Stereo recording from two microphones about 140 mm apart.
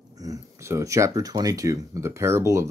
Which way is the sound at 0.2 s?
25° right (ahead or behind).